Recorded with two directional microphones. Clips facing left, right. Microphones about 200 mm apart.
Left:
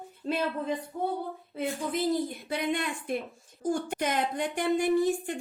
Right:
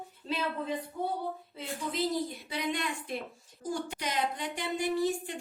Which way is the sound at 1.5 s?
55° left (ahead or behind).